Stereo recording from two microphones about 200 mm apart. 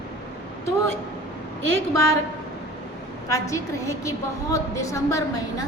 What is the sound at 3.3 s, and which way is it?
A woman's voice, 15° left (ahead or behind).